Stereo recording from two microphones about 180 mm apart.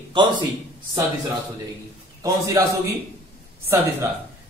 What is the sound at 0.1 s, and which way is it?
Speech, 25° right (ahead or behind).